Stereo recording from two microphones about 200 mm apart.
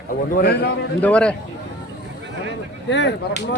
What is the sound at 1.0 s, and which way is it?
Speech, 5° left (ahead or behind).